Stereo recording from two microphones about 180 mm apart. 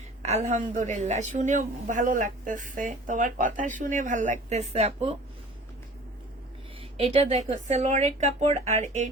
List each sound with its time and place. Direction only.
0.2 s a woman's voice: 40° right (ahead or behind)
6.9 s speech: 35° right (ahead or behind)